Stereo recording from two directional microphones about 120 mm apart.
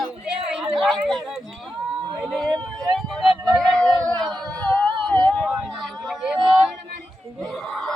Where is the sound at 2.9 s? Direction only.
Centre (ahead or behind).